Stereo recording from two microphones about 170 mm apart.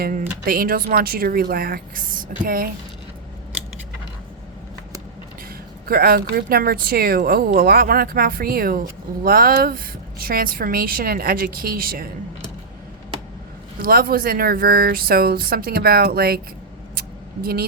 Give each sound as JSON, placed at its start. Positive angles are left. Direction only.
{"t": 0.0, "sound": "speech", "side_deg": -50}
{"t": 5.8, "sound": "speech", "side_deg": -60}
{"t": 13.8, "sound": "speech", "side_deg": -60}
{"t": 16.9, "sound": "vehicle", "side_deg": -65}